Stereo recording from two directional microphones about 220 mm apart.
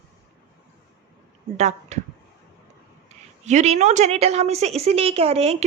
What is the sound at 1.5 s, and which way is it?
Speech, 30° right (ahead or behind).